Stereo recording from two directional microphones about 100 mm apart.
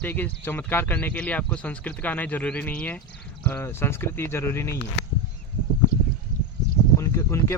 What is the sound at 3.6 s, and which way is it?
Speech, 25° left (ahead or behind).